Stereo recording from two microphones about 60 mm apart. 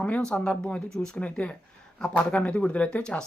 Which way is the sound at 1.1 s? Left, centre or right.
Left.